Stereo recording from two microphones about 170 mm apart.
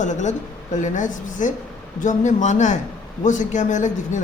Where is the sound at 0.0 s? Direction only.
45° left (ahead or behind).